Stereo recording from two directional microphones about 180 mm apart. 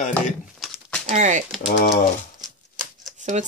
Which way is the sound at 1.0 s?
40° right (ahead or behind).